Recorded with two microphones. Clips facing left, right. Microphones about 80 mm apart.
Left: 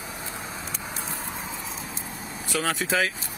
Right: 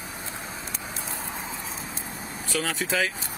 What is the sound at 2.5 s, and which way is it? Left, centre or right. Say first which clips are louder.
Speech: left 2 dB; centre.